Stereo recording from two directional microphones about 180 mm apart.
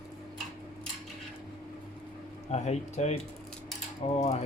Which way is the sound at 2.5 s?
40° left (ahead or behind).